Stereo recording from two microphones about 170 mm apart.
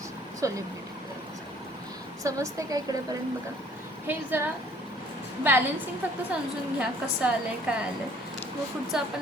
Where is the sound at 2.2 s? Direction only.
20° right (ahead or behind).